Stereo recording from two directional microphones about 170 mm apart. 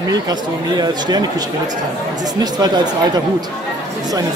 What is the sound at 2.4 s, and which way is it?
Speech, 25° right (ahead or behind).